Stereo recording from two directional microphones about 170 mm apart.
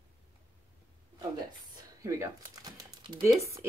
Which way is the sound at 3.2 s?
15° right (ahead or behind).